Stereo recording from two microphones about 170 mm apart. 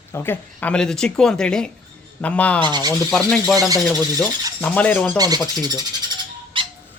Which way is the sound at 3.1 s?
Centre (ahead or behind).